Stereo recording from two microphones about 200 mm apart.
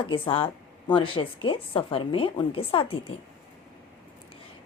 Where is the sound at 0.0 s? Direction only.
25° left (ahead or behind).